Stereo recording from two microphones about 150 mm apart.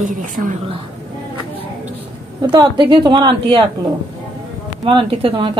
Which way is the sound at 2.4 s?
30° right (ahead or behind).